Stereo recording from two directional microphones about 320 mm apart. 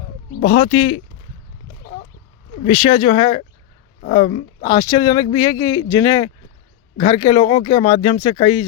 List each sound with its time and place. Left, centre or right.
0.4 s speech: centre
1.8 s a sound: left
2.6 s speech: centre